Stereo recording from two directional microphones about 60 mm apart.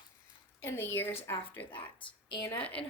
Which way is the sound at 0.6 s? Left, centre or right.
Left.